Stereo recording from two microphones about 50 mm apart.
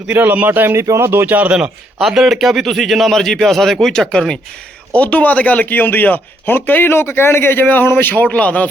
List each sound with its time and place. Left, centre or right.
0.1 s speech: right
0.8 s speech: right
1.3 s a man's voice: right
2.0 s speech: centre
4.9 s speech: left